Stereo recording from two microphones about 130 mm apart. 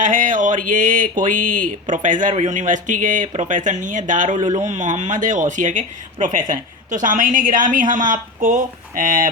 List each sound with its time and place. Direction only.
0.0 s speech: 80° right
2.3 s speech: 65° right (ahead or behind); by 9.3 s 90° right